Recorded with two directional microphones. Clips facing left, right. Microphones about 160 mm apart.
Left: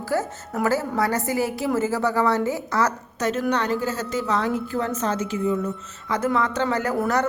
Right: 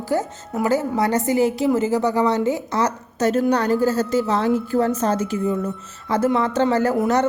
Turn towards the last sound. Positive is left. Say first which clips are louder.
# right 4 dB
turn(degrees=-20)  # may be behind; listen again after turning